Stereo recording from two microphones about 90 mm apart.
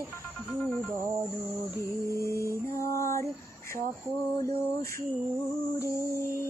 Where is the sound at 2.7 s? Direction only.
35° left (ahead or behind).